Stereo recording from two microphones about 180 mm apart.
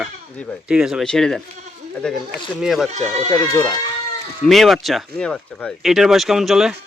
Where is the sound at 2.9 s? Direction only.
35° right (ahead or behind).